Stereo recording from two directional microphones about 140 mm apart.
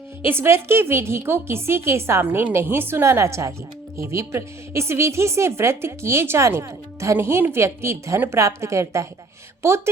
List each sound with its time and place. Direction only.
0.2 s a woman's voice: 15° right (ahead or behind)